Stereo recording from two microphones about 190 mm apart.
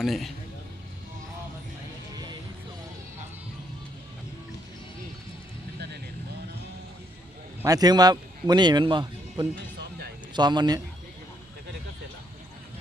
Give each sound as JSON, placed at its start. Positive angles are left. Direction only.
{"t": 0.0, "sound": "speech", "side_deg": 0}
{"t": 7.6, "sound": "speech", "side_deg": -20}